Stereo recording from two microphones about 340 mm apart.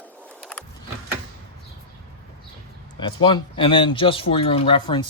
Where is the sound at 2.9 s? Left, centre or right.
Centre.